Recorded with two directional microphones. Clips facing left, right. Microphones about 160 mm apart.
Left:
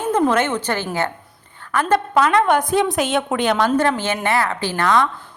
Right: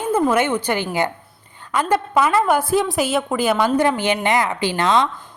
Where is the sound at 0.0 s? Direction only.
10° right (ahead or behind).